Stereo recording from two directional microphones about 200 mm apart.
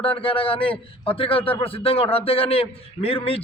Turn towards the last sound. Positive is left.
turn(degrees=30)  # may be behind; listen again after turning